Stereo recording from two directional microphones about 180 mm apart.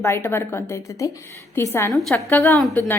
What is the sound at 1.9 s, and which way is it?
A woman's voice, 5° left (ahead or behind).